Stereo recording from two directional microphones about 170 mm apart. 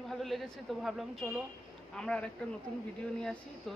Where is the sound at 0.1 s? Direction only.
Centre (ahead or behind).